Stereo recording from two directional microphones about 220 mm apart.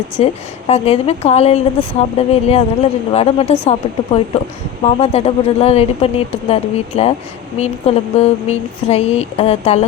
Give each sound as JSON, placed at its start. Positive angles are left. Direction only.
{"t": 0.2, "sound": "a woman's voice", "side_deg": 25}